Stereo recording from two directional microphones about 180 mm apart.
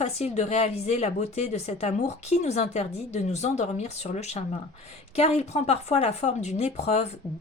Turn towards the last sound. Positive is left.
turn(degrees=40)  # may be behind; listen again after turning